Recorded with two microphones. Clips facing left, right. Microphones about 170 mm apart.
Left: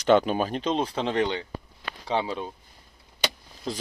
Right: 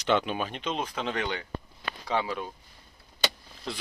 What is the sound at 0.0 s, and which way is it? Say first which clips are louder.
Speech: left 6 dB; 40° left (ahead or behind).